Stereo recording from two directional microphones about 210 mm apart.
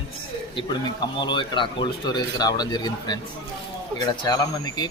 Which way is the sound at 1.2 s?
20° left (ahead or behind).